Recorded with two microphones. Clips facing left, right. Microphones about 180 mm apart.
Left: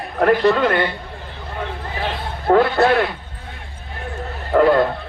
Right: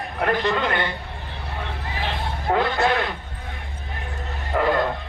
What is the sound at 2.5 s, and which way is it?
Speech, 60° left (ahead or behind).